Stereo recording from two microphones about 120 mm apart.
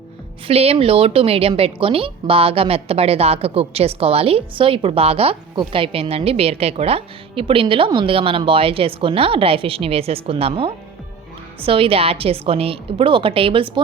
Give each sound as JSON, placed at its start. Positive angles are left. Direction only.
{"t": 0.4, "sound": "a woman's voice", "side_deg": -55}